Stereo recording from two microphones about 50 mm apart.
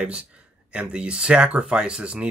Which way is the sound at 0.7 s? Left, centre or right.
Right.